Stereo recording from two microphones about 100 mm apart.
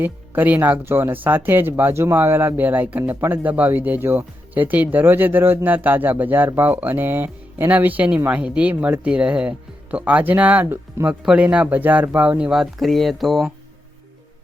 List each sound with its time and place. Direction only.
0.0 s speech: 15° right (ahead or behind); by 13.5 s centre (ahead or behind)